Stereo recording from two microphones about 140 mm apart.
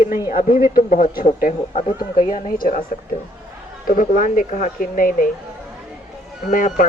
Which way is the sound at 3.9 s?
75° left (ahead or behind).